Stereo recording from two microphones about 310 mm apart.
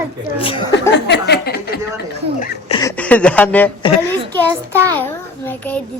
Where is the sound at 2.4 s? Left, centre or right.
Centre.